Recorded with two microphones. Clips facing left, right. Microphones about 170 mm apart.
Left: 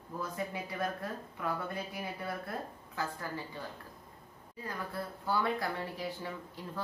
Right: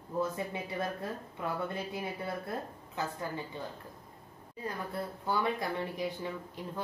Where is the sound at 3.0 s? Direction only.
20° right (ahead or behind).